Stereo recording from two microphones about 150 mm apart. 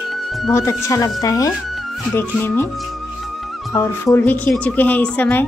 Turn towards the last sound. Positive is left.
turn(degrees=10)  # may be behind; listen again after turning